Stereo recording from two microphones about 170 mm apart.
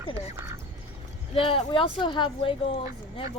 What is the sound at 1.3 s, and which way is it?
Speech, 30° left (ahead or behind).